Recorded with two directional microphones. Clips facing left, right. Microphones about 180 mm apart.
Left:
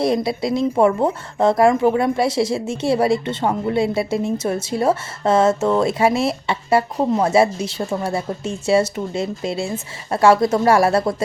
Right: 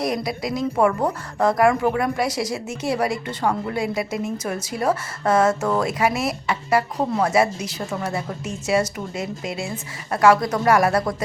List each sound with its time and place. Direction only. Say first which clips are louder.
0.0 s a woman's voice: left 5 dB; 30° left (ahead or behind)